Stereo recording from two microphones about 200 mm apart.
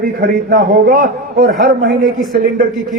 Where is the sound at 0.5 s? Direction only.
45° right (ahead or behind).